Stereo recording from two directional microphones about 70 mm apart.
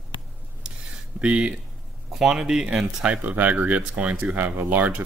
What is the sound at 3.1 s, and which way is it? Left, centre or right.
Speech, right.